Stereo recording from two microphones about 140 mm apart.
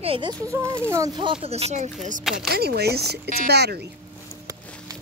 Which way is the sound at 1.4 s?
50° right (ahead or behind).